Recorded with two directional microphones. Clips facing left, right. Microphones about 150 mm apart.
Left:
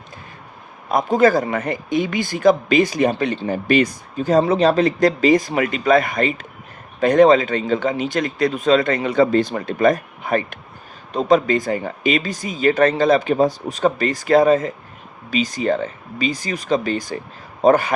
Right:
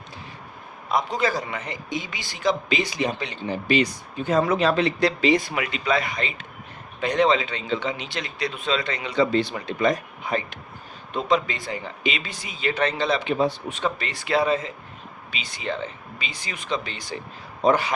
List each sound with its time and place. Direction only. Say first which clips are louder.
0.9 s speech: left 8 dB; 50° left (ahead or behind)